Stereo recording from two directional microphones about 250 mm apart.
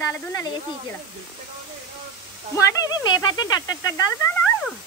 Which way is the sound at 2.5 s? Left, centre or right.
Centre.